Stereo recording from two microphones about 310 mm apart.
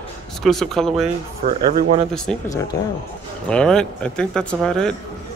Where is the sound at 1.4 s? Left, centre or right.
Right.